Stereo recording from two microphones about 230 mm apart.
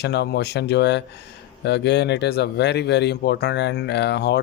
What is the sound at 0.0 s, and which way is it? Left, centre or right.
Speech, left.